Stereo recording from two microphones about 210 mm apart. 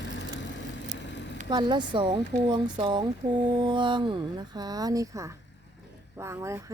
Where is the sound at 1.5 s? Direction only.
20° right (ahead or behind).